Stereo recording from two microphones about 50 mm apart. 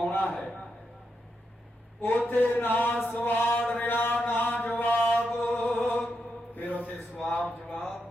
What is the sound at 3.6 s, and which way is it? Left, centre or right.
Mantra, left.